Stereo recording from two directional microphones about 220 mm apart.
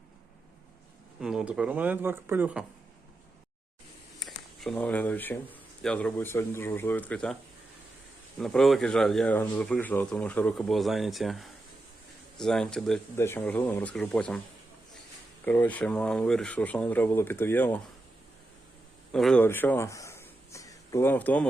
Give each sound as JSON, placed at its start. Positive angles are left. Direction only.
{"t": 1.2, "sound": "speech", "side_deg": -5}
{"t": 4.2, "sound": "speech", "side_deg": 0}
{"t": 8.4, "sound": "speech", "side_deg": 0}
{"t": 15.4, "sound": "speech", "side_deg": 5}
{"t": 19.1, "sound": "a man's voice", "side_deg": 5}